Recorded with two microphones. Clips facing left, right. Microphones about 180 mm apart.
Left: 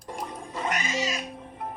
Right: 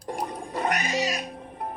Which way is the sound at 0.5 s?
60° right (ahead or behind).